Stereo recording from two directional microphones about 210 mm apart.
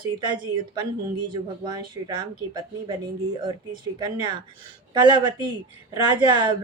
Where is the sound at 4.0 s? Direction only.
20° right (ahead or behind).